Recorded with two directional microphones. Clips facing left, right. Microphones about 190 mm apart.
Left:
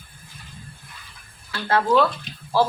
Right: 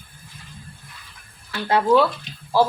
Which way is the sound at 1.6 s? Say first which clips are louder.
Right 2 dB; 15° right (ahead or behind).